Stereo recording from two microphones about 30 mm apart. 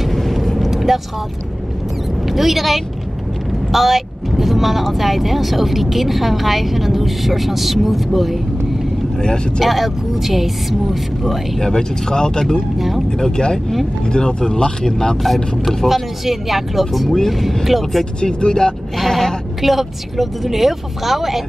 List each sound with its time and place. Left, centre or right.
0.1 s vehicle: centre
0.6 s vehicle: centre
2.2 s speech: centre
9.2 s speech: left
9.6 s speech: centre
11.6 s speech: left
12.7 s speech: centre
13.2 s speech: left
15.2 s speech: centre
18.2 s speech: left
18.9 s bleat: centre
19.6 s speech: centre